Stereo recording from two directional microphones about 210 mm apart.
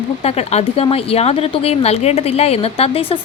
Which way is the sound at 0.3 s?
30° left (ahead or behind).